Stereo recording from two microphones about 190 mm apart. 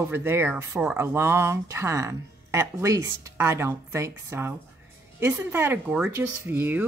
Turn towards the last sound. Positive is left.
turn(degrees=-10)  # may be behind; listen again after turning